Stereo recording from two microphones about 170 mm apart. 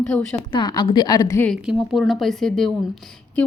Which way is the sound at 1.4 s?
Centre (ahead or behind).